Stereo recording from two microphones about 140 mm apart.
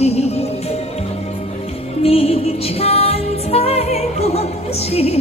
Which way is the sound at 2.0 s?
45° left (ahead or behind).